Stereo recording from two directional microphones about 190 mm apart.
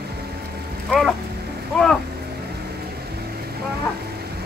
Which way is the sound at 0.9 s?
Centre (ahead or behind).